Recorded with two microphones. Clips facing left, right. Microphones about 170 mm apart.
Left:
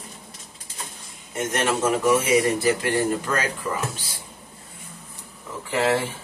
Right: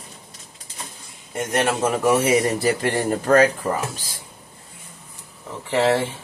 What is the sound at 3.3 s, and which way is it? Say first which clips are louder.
Speech: right 10 dB; 50° right (ahead or behind).